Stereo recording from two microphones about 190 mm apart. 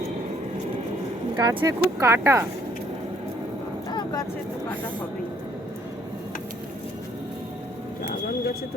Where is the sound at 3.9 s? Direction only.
25° left (ahead or behind).